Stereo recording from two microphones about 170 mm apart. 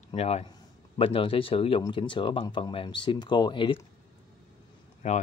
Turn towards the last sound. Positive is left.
turn(degrees=45)  # may be behind; listen again after turning